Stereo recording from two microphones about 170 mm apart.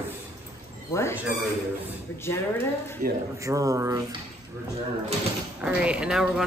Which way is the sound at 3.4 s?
20° right (ahead or behind).